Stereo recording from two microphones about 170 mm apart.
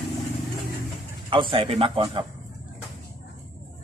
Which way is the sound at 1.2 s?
30° right (ahead or behind).